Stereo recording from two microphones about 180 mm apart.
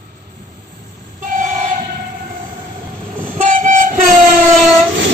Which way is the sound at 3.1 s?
45° right (ahead or behind).